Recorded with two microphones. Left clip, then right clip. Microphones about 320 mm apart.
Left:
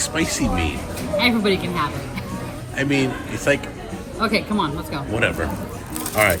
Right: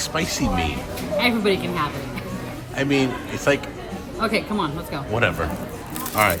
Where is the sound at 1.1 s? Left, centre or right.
Centre.